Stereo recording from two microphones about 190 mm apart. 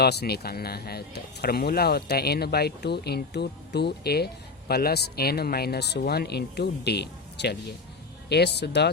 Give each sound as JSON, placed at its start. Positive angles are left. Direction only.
{"t": 0.0, "sound": "speech", "side_deg": 60}